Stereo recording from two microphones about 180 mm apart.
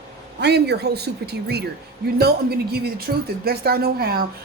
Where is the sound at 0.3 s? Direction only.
70° right (ahead or behind).